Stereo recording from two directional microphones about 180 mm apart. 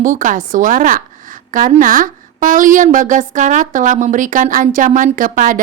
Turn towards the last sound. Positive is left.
turn(degrees=-50)  # may be behind; listen again after turning